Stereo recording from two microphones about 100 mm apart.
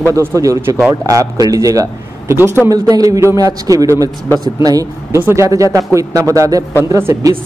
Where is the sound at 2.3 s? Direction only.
25° right (ahead or behind).